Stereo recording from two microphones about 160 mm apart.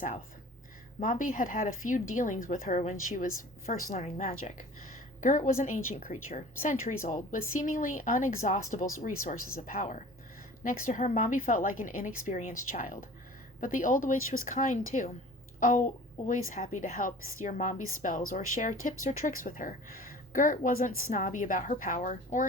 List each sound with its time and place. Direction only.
0.9 s a woman's voice: 50° left (ahead or behind)
16.2 s a woman's voice: 55° left (ahead or behind)